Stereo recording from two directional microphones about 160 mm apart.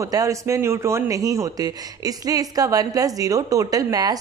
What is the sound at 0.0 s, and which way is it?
A man's voice, 20° right (ahead or behind).